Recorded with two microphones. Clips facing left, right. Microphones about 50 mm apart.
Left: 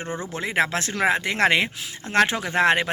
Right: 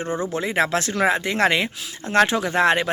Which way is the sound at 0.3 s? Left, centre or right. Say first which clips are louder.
Right 1 dB; left.